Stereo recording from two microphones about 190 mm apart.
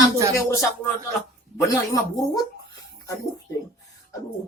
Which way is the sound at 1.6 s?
15° left (ahead or behind).